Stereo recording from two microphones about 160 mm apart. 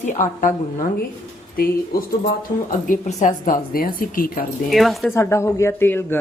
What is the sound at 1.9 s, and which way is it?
Speech, 70° left (ahead or behind).